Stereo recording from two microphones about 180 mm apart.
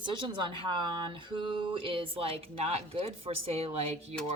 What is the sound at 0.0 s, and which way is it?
Speech, 25° right (ahead or behind).